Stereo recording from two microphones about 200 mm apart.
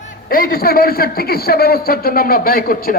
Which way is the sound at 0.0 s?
45° left (ahead or behind).